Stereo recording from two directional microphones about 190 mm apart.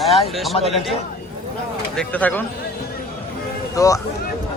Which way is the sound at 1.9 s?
10° left (ahead or behind).